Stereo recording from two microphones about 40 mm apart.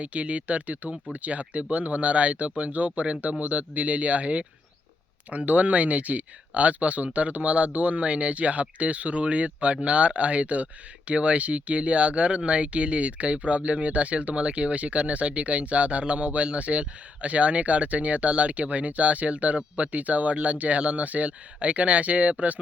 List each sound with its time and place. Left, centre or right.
0.0 s speech: right